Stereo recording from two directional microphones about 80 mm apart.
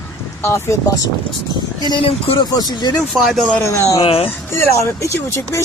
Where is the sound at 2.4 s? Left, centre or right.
Left.